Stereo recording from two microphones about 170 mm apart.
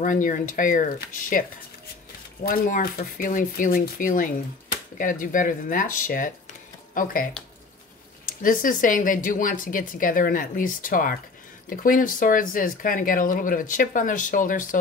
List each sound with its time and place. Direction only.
0.0 s speech: 50° left (ahead or behind)
2.4 s speech: 55° left (ahead or behind)
8.3 s speech: 55° left (ahead or behind)